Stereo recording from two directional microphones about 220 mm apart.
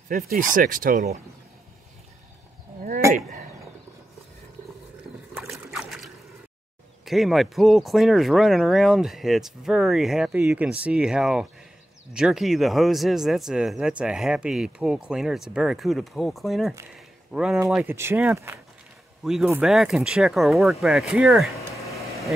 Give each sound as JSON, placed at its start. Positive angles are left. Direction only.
{"t": 0.1, "sound": "speech", "side_deg": -35}
{"t": 5.3, "sound": "boat", "side_deg": 0}
{"t": 7.1, "sound": "speech", "side_deg": 0}
{"t": 16.9, "sound": "a sound", "side_deg": -5}
{"t": 17.6, "sound": "speech", "side_deg": -5}
{"t": 21.5, "sound": "a sound", "side_deg": 15}